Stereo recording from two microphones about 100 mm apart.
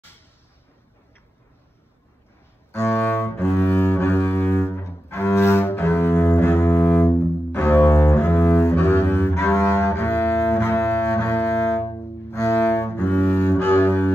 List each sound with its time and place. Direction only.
2.7 s cello: 25° left (ahead or behind)
3.5 s double bass: 20° left (ahead or behind)
6.3 s double bass: 15° left (ahead or behind)
6.7 s double bass: 30° left (ahead or behind)
7.5 s cello: 25° left (ahead or behind)
8.3 s double bass: 25° left (ahead or behind)
9.3 s cello: 30° left (ahead or behind)
11.3 s bowed string instrument: 25° left (ahead or behind)
12.5 s cello: 20° left (ahead or behind)